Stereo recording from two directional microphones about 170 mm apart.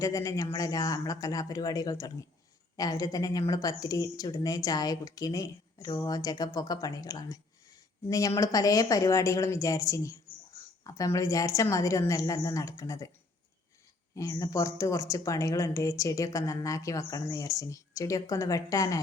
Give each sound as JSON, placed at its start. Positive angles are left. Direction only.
{"t": 0.0, "sound": "a woman's voice", "side_deg": 20}
{"t": 14.2, "sound": "a woman's voice", "side_deg": 20}